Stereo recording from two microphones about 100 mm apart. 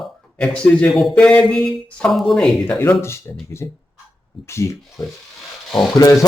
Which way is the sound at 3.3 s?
20° left (ahead or behind).